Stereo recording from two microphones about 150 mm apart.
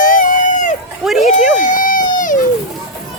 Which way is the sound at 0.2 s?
55° left (ahead or behind).